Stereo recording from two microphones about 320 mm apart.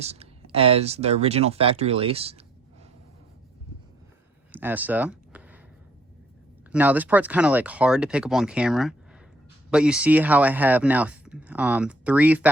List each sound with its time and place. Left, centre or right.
0.0 s speech: centre
4.5 s a sound: centre
6.7 s speech: centre